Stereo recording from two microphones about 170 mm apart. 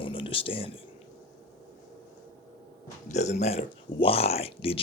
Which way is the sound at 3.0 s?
40° left (ahead or behind).